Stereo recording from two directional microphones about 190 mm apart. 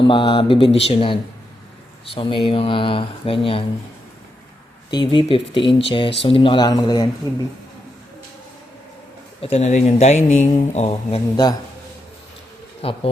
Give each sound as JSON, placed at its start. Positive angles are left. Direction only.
{"t": 0.0, "sound": "speech", "side_deg": 25}
{"t": 4.9, "sound": "speech", "side_deg": 25}
{"t": 9.4, "sound": "speech", "side_deg": 35}
{"t": 12.8, "sound": "bee", "side_deg": 30}